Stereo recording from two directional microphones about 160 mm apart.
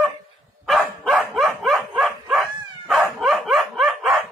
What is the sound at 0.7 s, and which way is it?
Dog, centre (ahead or behind).